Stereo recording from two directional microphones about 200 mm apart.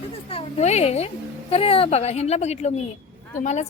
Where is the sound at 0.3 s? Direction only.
30° left (ahead or behind).